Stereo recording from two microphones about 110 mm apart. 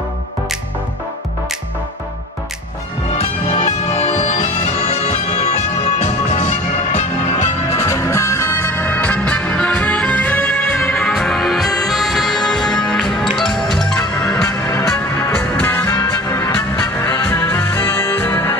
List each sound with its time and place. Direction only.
3.1 s bagpipes: 75° left (ahead or behind)
7.7 s music: 25° left (ahead or behind); by 14.3 s 5° left (ahead or behind)
14.3 s music: 25° left (ahead or behind)